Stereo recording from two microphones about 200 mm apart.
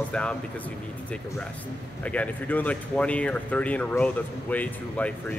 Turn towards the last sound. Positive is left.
turn(degrees=5)  # may be behind; listen again after turning